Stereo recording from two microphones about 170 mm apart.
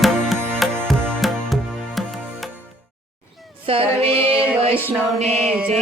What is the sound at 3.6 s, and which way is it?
Female singing, 35° right (ahead or behind).